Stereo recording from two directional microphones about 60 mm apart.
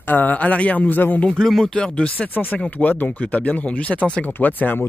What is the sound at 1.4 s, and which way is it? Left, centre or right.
Speech, centre.